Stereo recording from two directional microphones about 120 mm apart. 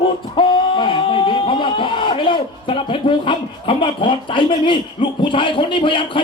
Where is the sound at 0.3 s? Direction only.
45° left (ahead or behind).